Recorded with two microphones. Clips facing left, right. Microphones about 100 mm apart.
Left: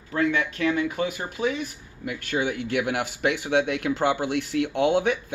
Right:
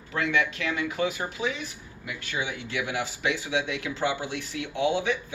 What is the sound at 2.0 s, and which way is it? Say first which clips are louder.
Speech: left 6 dB; 50° left (ahead or behind).